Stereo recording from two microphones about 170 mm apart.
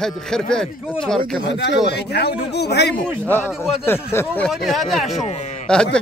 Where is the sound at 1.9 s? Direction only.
75° left (ahead or behind).